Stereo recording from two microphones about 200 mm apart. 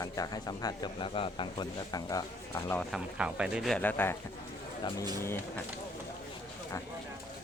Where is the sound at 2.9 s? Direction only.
5° right (ahead or behind).